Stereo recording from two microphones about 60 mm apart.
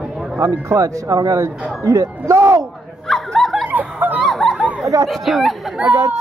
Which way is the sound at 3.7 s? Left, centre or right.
Right.